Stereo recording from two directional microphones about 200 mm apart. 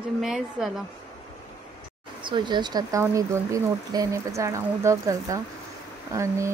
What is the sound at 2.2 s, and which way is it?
Speech, 25° right (ahead or behind).